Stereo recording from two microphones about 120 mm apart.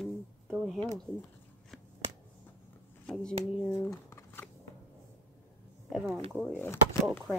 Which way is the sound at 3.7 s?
25° left (ahead or behind).